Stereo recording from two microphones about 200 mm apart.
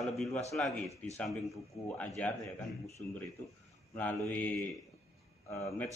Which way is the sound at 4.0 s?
10° left (ahead or behind).